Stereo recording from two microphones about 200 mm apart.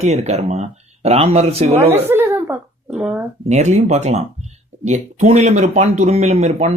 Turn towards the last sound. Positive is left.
turn(degrees=-35)  # may be behind; listen again after turning